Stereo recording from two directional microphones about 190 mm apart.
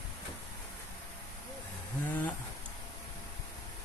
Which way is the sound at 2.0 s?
10° left (ahead or behind).